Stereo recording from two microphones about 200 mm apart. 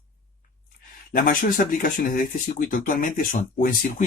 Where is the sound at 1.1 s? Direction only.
45° left (ahead or behind).